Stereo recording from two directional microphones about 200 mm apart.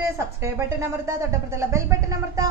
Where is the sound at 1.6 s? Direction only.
15° right (ahead or behind).